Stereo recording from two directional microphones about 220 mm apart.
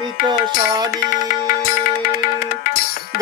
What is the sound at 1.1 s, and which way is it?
Music, 40° left (ahead or behind).